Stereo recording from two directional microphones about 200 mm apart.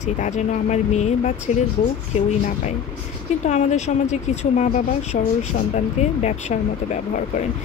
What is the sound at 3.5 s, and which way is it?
Speech, 35° left (ahead or behind).